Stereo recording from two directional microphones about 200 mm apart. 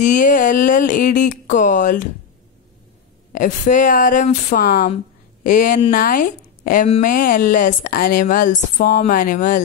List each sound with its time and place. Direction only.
0.0 s speech: 40° left (ahead or behind)
3.3 s speech: 40° left (ahead or behind)